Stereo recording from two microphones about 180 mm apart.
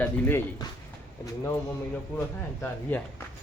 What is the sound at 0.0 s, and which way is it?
Speech, 10° left (ahead or behind).